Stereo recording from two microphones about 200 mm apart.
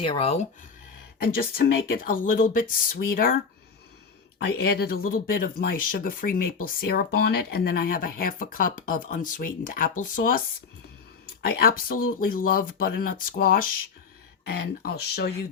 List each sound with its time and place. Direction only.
0.0 s speech: 30° left (ahead or behind)
1.2 s speech: 50° left (ahead or behind)
4.4 s speech: 55° left (ahead or behind)
11.4 s speech: 45° left (ahead or behind)